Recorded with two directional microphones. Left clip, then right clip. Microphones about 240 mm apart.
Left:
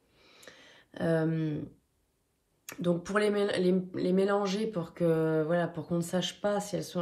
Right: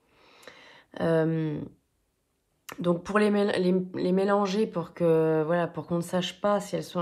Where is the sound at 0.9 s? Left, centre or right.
Right.